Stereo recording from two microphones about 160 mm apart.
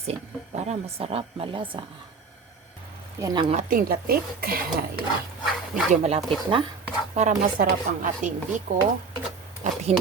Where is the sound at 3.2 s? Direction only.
25° right (ahead or behind).